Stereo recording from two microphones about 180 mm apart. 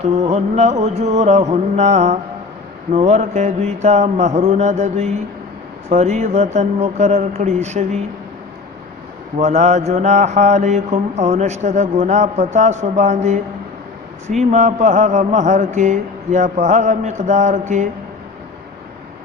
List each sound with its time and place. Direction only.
0.0 s mantra: 40° right (ahead or behind)
9.4 s mantra: 40° right (ahead or behind)